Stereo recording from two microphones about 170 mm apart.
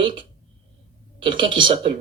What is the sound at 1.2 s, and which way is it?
Speech, 30° right (ahead or behind).